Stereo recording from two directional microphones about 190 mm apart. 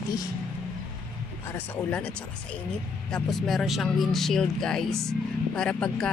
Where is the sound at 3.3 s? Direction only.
Centre (ahead or behind).